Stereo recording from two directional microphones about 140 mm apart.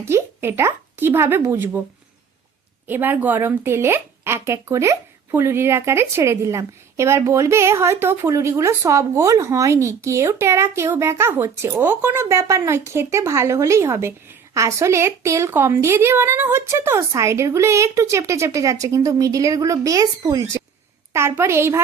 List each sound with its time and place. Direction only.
0.0 s speech: 20° right (ahead or behind)
2.8 s speech: 15° right (ahead or behind)